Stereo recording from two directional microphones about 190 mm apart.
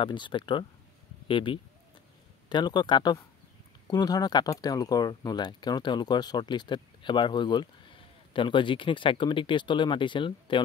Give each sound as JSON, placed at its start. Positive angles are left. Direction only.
{"t": 0.0, "sound": "speech", "side_deg": 25}